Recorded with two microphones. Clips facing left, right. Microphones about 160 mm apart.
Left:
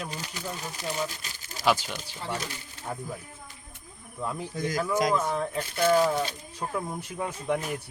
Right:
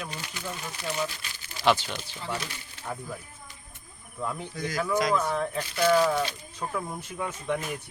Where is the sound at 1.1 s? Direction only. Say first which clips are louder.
Left 1 dB; 40° left (ahead or behind).